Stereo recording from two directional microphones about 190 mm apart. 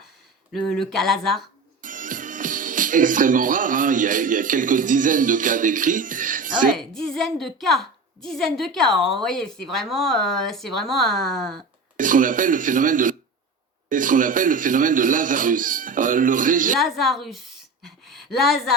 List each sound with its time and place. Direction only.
0.7 s a woman's voice: centre (ahead or behind)
1.8 s speech: 45° right (ahead or behind)
6.7 s a woman's voice: centre (ahead or behind)
11.9 s speech: 45° right (ahead or behind)
16.9 s a woman's voice: centre (ahead or behind)